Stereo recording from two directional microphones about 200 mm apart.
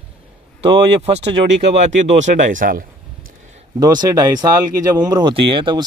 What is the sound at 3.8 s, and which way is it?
Speech, 20° right (ahead or behind).